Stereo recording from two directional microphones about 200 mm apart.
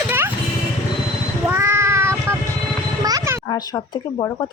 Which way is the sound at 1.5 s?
15° right (ahead or behind).